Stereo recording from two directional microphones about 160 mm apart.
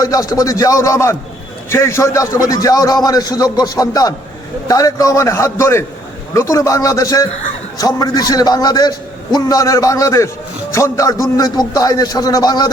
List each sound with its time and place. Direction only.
0.0 s a man's voice: 20° left (ahead or behind)